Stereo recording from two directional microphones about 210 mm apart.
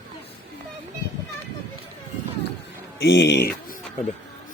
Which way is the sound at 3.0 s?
55° left (ahead or behind).